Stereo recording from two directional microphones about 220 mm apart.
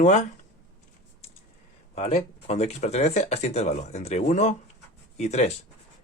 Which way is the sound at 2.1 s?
30° left (ahead or behind).